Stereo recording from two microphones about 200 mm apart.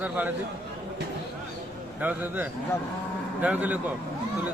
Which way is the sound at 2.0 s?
10° right (ahead or behind).